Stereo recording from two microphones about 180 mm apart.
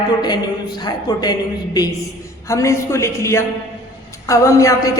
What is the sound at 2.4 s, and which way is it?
A man's voice, 15° left (ahead or behind).